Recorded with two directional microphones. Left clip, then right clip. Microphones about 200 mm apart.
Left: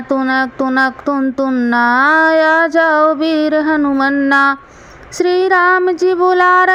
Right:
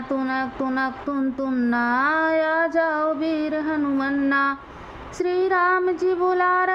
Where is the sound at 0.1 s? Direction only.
25° left (ahead or behind).